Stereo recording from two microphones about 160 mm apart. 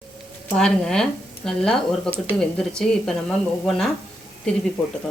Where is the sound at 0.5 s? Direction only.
5° left (ahead or behind).